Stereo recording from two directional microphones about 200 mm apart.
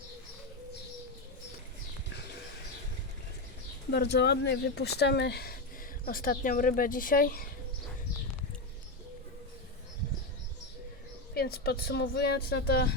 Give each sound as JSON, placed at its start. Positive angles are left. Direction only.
{"t": 3.9, "sound": "speech", "side_deg": 55}
{"t": 11.3, "sound": "speech", "side_deg": 50}